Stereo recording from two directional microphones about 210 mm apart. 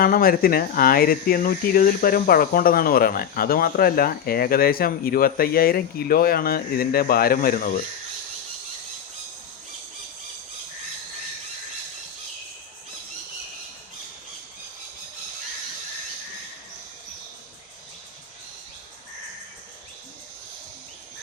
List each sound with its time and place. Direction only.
0.0 s speech: 45° left (ahead or behind)